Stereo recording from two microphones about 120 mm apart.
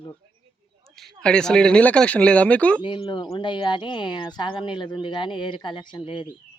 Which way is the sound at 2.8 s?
40° left (ahead or behind).